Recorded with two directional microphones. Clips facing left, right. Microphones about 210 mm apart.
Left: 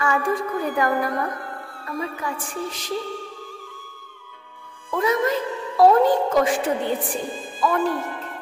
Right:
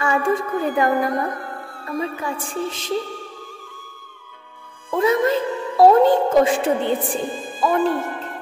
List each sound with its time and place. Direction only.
0.0 s a woman's voice: 25° right (ahead or behind)
4.9 s a woman's voice: 30° right (ahead or behind)